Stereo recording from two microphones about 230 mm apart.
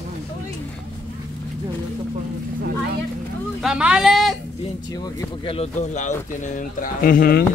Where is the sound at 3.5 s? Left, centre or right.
Centre.